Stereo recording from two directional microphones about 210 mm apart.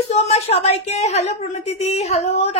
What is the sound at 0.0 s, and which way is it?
A woman's voice, 30° left (ahead or behind).